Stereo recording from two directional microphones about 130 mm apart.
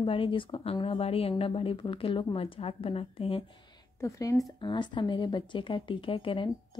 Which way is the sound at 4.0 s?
25° left (ahead or behind).